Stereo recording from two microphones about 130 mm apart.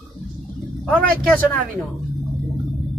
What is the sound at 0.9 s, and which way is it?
Speech, 10° left (ahead or behind).